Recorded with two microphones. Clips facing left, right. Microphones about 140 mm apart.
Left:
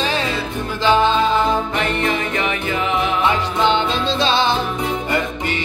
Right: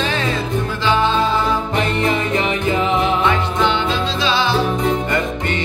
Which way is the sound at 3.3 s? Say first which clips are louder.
Even; 20° left (ahead or behind).